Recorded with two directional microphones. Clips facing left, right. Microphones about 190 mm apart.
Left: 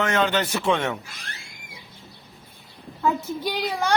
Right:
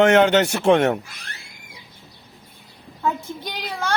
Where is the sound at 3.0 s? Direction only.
Centre (ahead or behind).